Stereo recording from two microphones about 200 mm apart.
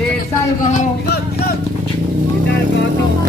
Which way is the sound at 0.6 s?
40° left (ahead or behind).